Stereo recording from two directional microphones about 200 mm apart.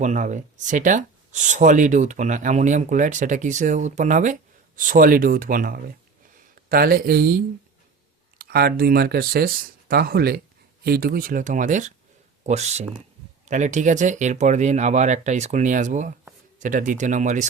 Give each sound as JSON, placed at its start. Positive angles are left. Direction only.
{"t": 0.0, "sound": "speech", "side_deg": -40}